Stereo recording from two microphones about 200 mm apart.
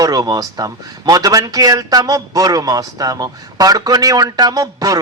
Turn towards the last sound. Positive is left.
turn(degrees=-20)  # may be behind; listen again after turning